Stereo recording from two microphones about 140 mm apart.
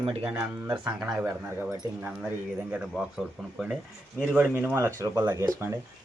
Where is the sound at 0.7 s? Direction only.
5° right (ahead or behind).